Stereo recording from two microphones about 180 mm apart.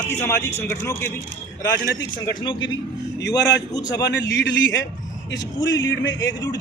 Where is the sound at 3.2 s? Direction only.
70° left (ahead or behind).